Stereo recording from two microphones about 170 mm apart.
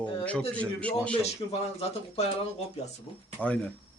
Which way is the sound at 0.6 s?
5° left (ahead or behind).